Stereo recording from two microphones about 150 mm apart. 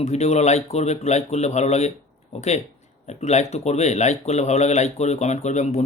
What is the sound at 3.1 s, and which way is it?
Speech, 50° left (ahead or behind).